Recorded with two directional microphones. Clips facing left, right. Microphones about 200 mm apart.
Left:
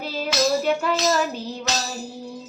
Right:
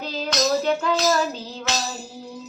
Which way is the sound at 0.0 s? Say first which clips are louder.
Left 1 dB; 10° left (ahead or behind).